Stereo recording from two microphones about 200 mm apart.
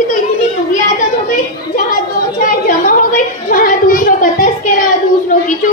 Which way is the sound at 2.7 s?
40° left (ahead or behind).